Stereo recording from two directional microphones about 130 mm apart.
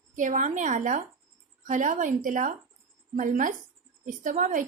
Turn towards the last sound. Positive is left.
turn(degrees=-75)  # may be behind; listen again after turning